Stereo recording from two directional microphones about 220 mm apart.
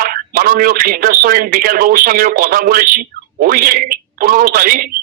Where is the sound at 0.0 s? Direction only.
40° right (ahead or behind).